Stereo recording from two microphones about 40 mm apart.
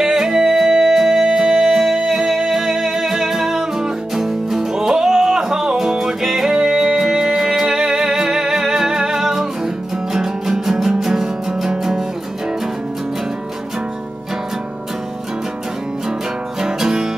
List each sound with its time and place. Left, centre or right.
0.0 s music: centre
16.6 s music: centre